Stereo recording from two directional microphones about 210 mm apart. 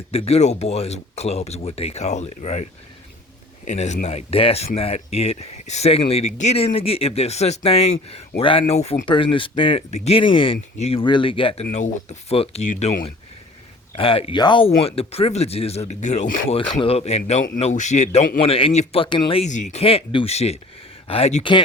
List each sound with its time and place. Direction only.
0.1 s a man's voice: 30° left (ahead or behind)
3.7 s speech: 35° left (ahead or behind)
13.9 s a man's voice: 25° left (ahead or behind)